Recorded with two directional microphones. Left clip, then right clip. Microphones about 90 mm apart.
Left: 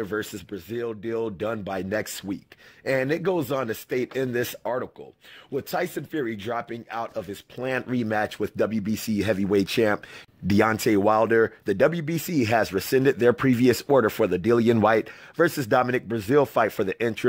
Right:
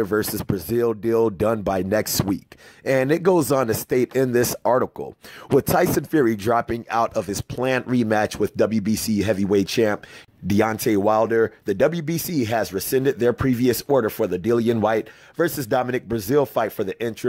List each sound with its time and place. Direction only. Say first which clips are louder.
0.2 s speech: right 8 dB; 55° right (ahead or behind)
6.1 s speech: right 9 dB; 70° right (ahead or behind)
6.9 s speech: right 11 dB; 45° right (ahead or behind)
7.5 s speech: right 5 dB; 30° right (ahead or behind)
9.1 s speech: right 2 dB; 15° right (ahead or behind)
12.4 s speech: left 1 dB; 5° left (ahead or behind)